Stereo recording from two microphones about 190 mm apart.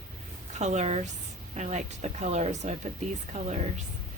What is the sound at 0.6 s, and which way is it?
Speech, 35° right (ahead or behind).